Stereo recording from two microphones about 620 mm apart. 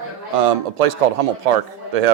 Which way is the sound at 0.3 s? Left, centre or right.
Right.